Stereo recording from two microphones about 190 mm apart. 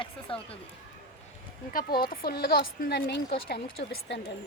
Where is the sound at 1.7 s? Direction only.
50° left (ahead or behind).